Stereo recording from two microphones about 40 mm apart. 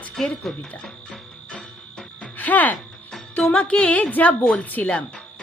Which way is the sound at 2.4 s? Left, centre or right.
Left.